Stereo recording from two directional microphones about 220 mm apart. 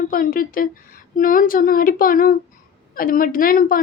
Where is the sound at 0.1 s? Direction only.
40° left (ahead or behind).